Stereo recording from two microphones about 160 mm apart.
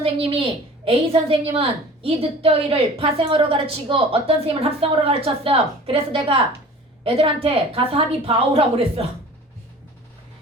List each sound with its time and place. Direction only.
0.0 s a woman's voice: 35° right (ahead or behind)
7.4 s a woman's voice: 35° right (ahead or behind)